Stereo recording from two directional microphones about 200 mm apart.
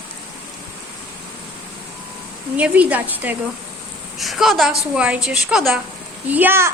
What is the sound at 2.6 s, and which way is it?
A woman's voice, 5° right (ahead or behind).